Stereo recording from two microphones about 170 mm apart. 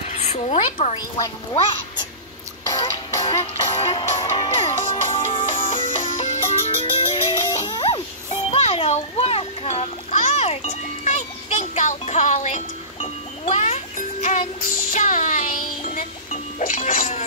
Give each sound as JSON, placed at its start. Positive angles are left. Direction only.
{"t": 0.0, "sound": "speech", "side_deg": 40}
{"t": 0.9, "sound": "a woman's voice", "side_deg": 25}
{"t": 2.7, "sound": "music", "side_deg": 25}
{"t": 5.5, "sound": "music", "side_deg": 45}
{"t": 7.6, "sound": "music", "side_deg": 25}
{"t": 8.5, "sound": "splash", "side_deg": 35}